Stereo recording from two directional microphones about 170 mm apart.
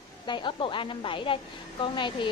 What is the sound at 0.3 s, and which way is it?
A woman's voice, 30° left (ahead or behind).